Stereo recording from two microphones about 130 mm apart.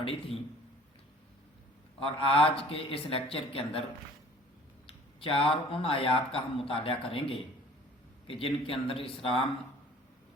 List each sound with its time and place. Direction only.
0.0 s speech: 45° left (ahead or behind)
2.0 s speech: 45° left (ahead or behind)
4.9 s speech: 45° left (ahead or behind)